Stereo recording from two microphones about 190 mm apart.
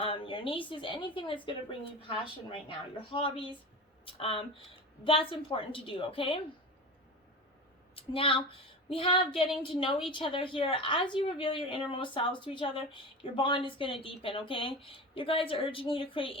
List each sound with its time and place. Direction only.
0.0 s a woman's voice: 30° left (ahead or behind)
7.9 s a woman's voice: 30° left (ahead or behind)